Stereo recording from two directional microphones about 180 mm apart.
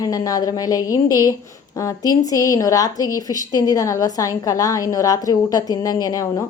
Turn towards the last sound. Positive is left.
turn(degrees=20)  # may be behind; listen again after turning